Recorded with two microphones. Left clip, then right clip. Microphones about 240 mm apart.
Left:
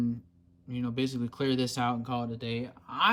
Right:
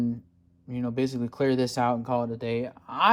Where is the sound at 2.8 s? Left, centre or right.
Centre.